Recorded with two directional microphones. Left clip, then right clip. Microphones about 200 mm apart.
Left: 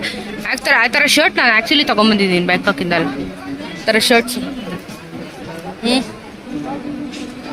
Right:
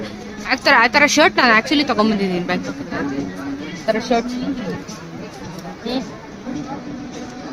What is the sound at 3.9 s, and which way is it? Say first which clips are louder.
Speech: left 6 dB; 30° left (ahead or behind).